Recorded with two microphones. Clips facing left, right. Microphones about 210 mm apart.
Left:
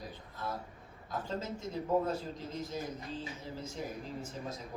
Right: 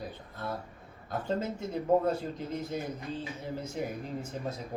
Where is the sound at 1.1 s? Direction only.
60° right (ahead or behind).